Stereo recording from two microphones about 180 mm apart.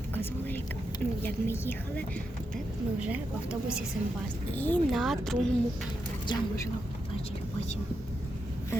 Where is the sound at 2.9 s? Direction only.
5° right (ahead or behind).